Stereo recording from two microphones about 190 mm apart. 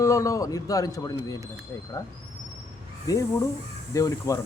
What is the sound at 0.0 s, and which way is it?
Speech, 15° left (ahead or behind).